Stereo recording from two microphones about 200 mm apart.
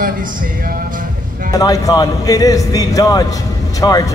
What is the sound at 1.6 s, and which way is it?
A man's voice, 20° left (ahead or behind).